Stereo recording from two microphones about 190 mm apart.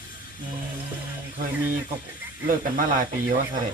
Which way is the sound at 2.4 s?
45° right (ahead or behind).